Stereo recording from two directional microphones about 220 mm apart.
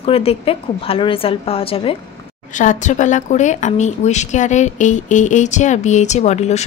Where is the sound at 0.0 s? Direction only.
25° left (ahead or behind).